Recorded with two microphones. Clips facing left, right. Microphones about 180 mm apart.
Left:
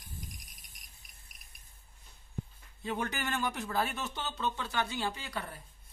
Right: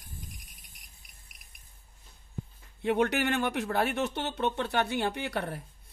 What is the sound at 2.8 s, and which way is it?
Speech, 65° right (ahead or behind).